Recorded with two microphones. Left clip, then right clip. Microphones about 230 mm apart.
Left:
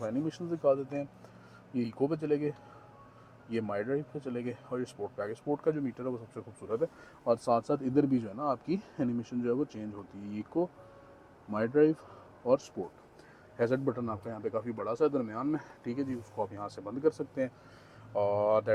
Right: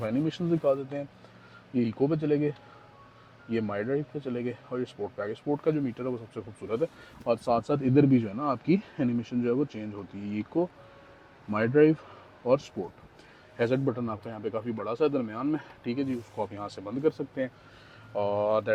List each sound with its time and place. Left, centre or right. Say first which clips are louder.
0.0 s speech: right 5 dB; right